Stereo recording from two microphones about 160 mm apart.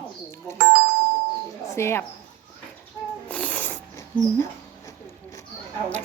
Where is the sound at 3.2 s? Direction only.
10° left (ahead or behind).